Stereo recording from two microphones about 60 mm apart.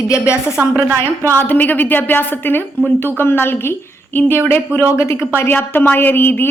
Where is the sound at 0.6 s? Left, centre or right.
Right.